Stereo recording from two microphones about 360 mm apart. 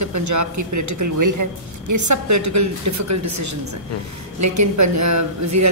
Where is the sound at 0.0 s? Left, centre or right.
Right.